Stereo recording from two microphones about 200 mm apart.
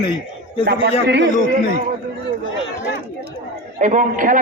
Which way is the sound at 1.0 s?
60° right (ahead or behind).